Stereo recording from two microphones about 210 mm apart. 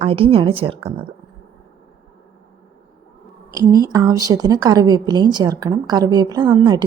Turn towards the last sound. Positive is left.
turn(degrees=-20)  # may be behind; listen again after turning